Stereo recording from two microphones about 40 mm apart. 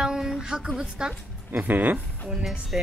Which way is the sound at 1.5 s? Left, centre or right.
Right.